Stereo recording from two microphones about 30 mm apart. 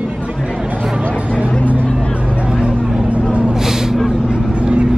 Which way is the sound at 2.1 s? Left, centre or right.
Right.